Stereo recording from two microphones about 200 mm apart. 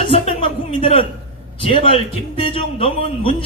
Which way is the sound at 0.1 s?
30° left (ahead or behind).